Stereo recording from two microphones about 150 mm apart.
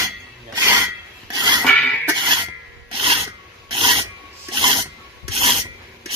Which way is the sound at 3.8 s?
35° right (ahead or behind).